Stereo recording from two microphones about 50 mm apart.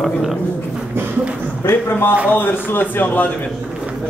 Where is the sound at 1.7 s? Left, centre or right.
Left.